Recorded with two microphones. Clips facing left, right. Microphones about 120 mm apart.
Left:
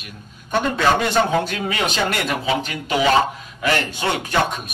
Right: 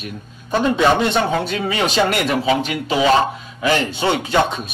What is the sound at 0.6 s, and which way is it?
A man's voice, 25° right (ahead or behind).